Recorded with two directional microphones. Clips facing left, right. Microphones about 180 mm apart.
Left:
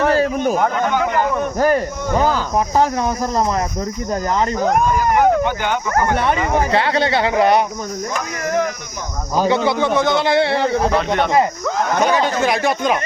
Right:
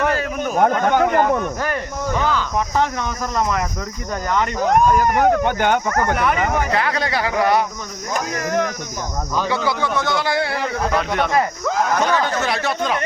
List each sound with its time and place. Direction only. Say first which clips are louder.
0.0 s a sound: left 5 dB; 35° left (ahead or behind)
0.5 s speech: right 1 dB; 50° right (ahead or behind)
1.5 s speech: left 7 dB; 40° left (ahead or behind)
5.5 s speech: right 2 dB; 50° right (ahead or behind)
5.9 s speech: left 2 dB; 30° left (ahead or behind)
9.6 s speech: left 5 dB; 25° left (ahead or behind)
12.0 s speech: left 3 dB; 15° left (ahead or behind)